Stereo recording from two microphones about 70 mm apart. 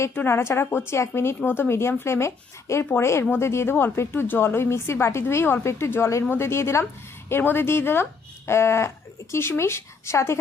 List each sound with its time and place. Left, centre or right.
0.3 s a woman's voice: left